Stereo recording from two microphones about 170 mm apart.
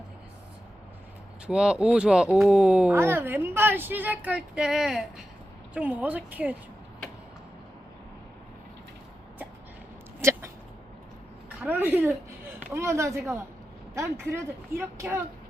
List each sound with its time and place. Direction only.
1.5 s speech: 5° right (ahead or behind)
10.2 s a sound: 15° right (ahead or behind)
11.4 s a woman's voice: 10° right (ahead or behind)